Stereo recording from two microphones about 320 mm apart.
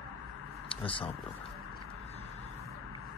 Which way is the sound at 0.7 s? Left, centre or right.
Centre.